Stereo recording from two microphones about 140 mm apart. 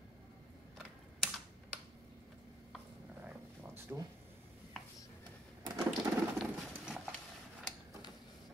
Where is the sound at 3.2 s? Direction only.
15° right (ahead or behind).